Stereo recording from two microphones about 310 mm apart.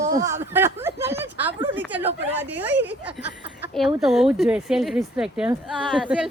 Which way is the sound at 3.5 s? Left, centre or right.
Centre.